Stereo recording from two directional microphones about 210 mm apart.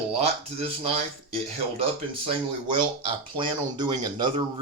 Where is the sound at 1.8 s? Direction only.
25° right (ahead or behind).